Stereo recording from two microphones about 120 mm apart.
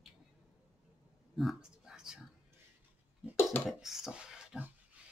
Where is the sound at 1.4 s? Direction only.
Centre (ahead or behind).